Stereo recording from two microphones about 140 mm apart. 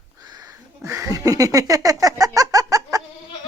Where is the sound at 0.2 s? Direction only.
30° right (ahead or behind).